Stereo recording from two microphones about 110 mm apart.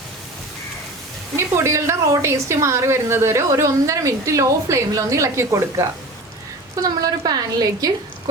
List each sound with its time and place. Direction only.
1.4 s a woman's voice: 25° right (ahead or behind)